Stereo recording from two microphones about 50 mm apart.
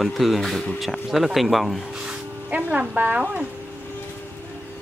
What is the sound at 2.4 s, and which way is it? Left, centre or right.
Speech, right.